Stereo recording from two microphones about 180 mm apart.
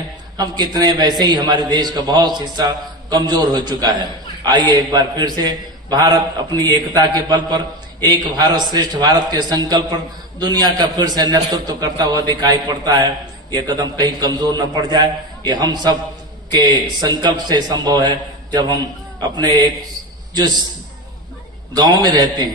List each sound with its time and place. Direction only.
0.7 s a man's voice: 20° right (ahead or behind)
21.7 s a man's voice: 25° right (ahead or behind)